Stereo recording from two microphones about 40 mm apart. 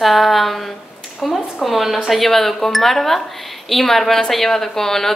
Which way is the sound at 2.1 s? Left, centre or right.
Centre.